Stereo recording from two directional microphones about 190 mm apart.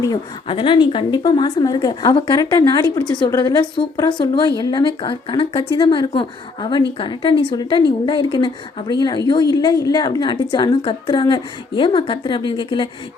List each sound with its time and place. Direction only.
0.0 s a woman's voice: 25° left (ahead or behind)